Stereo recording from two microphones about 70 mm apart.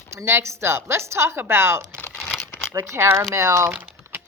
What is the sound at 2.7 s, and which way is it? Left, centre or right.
Speech, right.